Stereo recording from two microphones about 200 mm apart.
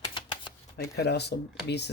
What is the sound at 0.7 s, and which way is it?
Speech, 55° left (ahead or behind).